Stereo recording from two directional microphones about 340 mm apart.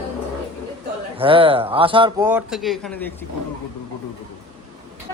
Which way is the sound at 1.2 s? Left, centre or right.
Centre.